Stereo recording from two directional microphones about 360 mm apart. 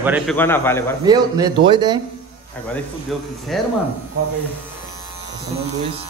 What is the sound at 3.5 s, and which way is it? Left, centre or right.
Speech, centre.